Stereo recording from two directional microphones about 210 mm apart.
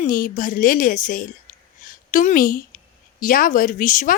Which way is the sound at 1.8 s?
40° left (ahead or behind).